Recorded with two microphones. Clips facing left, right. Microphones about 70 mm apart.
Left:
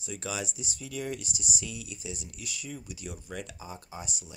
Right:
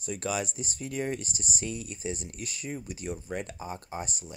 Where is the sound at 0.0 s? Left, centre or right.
Right.